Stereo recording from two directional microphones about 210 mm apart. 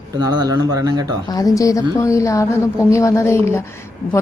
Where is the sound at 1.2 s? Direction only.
15° left (ahead or behind).